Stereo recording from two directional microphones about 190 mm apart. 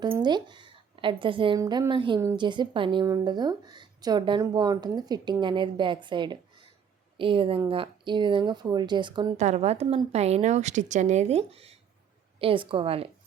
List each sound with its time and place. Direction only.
0.2 s a woman's voice: 25° right (ahead or behind)
9.4 s a woman's voice: 35° right (ahead or behind)